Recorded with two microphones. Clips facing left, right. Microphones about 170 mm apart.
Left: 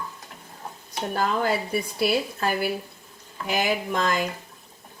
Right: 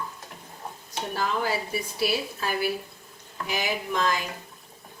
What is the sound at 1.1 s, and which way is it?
A woman's voice, 55° left (ahead or behind).